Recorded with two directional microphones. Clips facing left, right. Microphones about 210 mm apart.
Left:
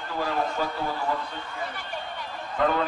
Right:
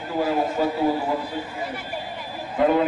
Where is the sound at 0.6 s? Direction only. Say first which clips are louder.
Right 8 dB; 35° right (ahead or behind).